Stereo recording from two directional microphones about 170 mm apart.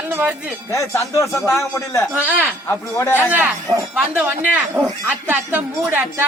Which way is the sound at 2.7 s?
15° left (ahead or behind).